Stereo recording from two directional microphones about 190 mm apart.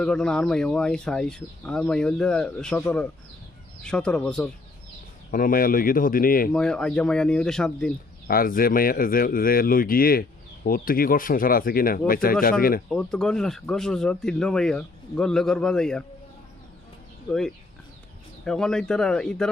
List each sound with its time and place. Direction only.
0.0 s speech: 5° left (ahead or behind)
5.3 s speech: 50° left (ahead or behind)
6.5 s speech: 5° left (ahead or behind)
8.3 s speech: 50° left (ahead or behind)
12.9 s speech: 5° left (ahead or behind)
17.2 s speech: 5° left (ahead or behind)